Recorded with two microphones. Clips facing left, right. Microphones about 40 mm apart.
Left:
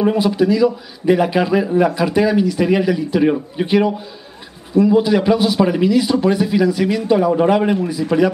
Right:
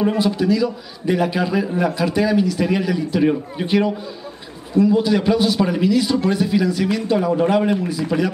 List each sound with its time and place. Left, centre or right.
0.0 s speech: centre